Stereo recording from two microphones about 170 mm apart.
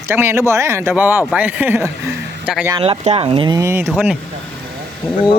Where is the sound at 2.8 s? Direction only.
35° right (ahead or behind); by 4.1 s 10° right (ahead or behind).